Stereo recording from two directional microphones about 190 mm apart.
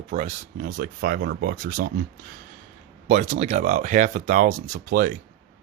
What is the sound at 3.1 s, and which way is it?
Speech, 35° right (ahead or behind).